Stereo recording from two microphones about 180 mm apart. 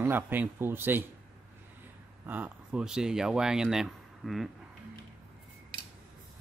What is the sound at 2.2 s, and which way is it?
Speech, 10° right (ahead or behind).